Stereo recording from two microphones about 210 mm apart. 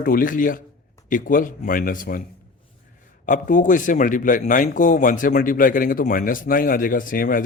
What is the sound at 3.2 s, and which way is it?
Speech, 40° left (ahead or behind).